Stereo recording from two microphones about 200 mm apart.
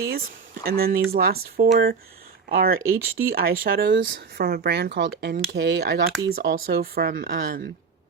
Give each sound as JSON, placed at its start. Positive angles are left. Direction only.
{"t": 0.0, "sound": "speech", "side_deg": -50}
{"t": 2.8, "sound": "speech", "side_deg": -15}
{"t": 3.3, "sound": "speech", "side_deg": -45}